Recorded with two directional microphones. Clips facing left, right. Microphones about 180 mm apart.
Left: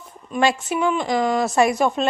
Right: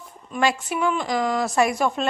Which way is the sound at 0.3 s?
25° left (ahead or behind).